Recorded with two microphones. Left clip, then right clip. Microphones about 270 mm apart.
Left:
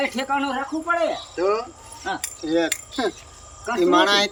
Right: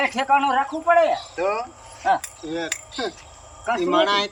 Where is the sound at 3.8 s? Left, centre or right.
Centre.